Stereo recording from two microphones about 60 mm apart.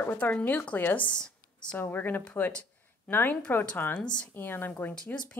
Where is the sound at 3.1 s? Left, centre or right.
Left.